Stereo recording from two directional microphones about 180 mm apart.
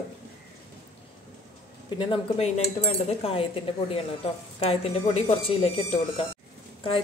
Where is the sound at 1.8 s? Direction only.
25° left (ahead or behind).